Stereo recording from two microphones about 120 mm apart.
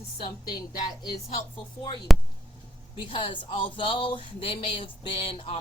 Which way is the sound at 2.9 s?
45° left (ahead or behind).